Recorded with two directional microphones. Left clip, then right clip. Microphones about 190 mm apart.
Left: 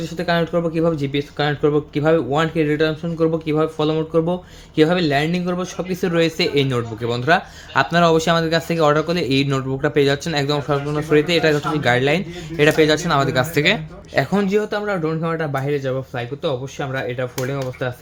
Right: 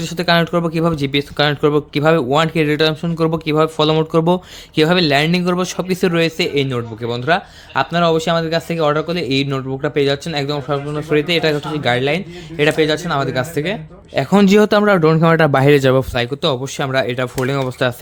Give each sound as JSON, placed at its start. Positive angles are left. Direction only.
{"t": 0.0, "sound": "speech", "side_deg": -40}
{"t": 6.1, "sound": "speech", "side_deg": -25}
{"t": 14.3, "sound": "speech", "side_deg": -60}